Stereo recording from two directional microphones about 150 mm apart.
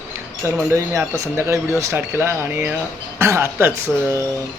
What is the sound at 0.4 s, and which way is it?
A man's voice, 20° right (ahead or behind).